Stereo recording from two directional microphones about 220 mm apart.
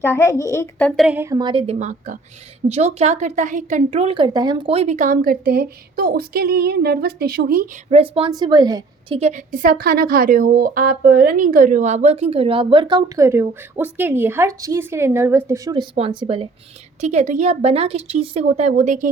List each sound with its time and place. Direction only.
0.0 s a woman's voice: 10° left (ahead or behind); by 7.7 s 40° right (ahead or behind)
8.1 s a woman's voice: 20° right (ahead or behind)